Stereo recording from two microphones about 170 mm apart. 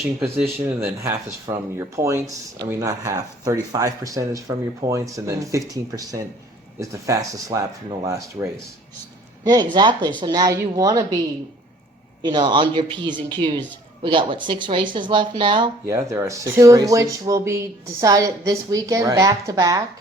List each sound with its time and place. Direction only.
0.2 s speech: 5° right (ahead or behind)
9.7 s speech: 25° right (ahead or behind)
12.2 s speech: 25° right (ahead or behind)
15.9 s speech: 15° right (ahead or behind)